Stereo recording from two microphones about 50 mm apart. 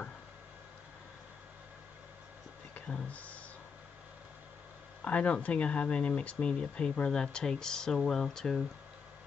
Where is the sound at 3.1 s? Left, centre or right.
Left.